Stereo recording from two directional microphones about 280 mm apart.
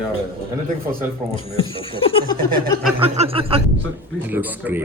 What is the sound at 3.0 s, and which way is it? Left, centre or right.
Chuckle, right.